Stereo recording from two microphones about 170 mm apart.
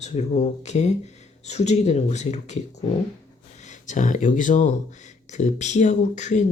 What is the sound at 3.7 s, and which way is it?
Speech, 45° left (ahead or behind).